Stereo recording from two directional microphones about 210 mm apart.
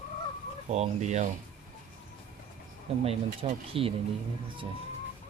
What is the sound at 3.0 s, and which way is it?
Speech, 25° right (ahead or behind).